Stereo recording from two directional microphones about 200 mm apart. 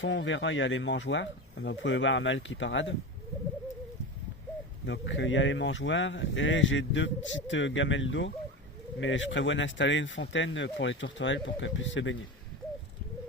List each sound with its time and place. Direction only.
0.0 s speech: 65° left (ahead or behind)
4.9 s speech: 70° left (ahead or behind)